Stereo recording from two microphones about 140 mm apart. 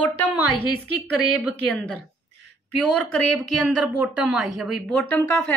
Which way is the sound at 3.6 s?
5° right (ahead or behind).